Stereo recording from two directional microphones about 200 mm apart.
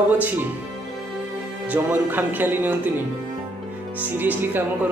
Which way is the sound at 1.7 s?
10° right (ahead or behind).